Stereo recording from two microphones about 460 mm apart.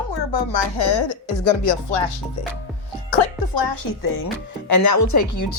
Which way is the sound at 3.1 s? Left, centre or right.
Left.